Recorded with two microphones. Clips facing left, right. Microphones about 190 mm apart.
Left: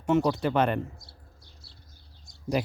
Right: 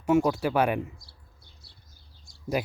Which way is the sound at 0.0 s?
5° right (ahead or behind).